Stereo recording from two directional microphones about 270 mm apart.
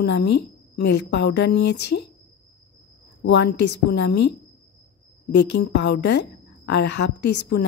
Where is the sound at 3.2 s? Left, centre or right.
Left.